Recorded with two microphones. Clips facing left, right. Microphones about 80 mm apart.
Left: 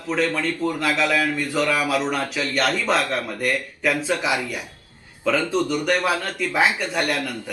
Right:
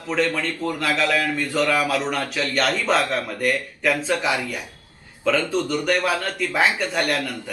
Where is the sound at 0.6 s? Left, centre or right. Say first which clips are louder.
Even; centre.